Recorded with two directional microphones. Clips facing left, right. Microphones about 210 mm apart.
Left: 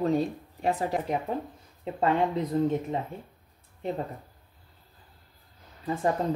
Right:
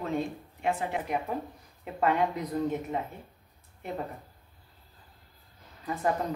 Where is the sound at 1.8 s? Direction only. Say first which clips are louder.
Left 2 dB; 25° left (ahead or behind).